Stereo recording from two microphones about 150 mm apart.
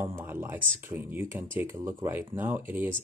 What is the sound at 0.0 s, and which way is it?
Speech, 15° right (ahead or behind).